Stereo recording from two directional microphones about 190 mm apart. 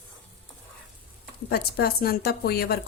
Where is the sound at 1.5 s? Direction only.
55° left (ahead or behind).